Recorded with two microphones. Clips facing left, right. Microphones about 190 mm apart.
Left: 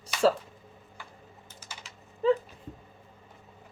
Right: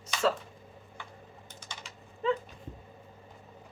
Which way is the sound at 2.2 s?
40° left (ahead or behind).